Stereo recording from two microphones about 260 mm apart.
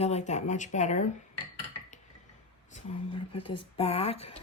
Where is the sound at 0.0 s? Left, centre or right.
Left.